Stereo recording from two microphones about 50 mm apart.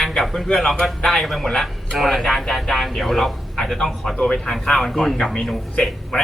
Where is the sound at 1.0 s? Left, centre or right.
Centre.